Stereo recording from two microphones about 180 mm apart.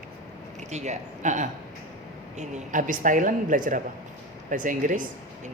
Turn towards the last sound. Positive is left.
turn(degrees=-45)  # may be behind; listen again after turning